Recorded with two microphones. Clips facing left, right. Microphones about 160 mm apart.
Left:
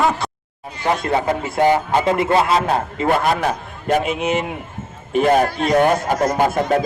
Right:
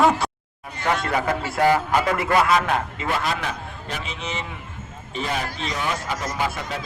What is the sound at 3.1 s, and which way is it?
A man's voice, 50° left (ahead or behind).